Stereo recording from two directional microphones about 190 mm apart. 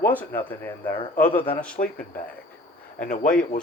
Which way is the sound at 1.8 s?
35° left (ahead or behind).